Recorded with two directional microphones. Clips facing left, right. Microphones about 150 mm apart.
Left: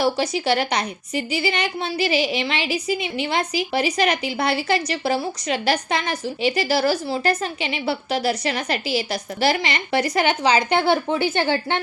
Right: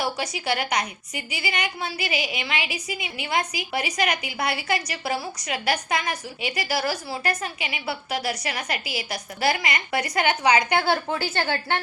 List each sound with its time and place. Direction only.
0.0 s a woman's voice: 30° left (ahead or behind)